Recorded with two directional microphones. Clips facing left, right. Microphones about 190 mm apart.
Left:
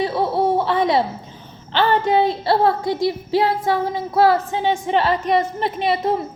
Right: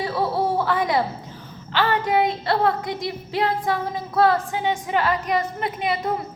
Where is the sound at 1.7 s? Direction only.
25° left (ahead or behind).